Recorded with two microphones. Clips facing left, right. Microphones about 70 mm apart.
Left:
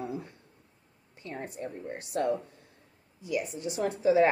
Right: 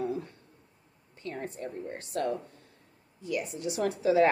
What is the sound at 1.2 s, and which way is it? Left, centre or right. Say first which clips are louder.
A woman's voice: right 1 dB; centre.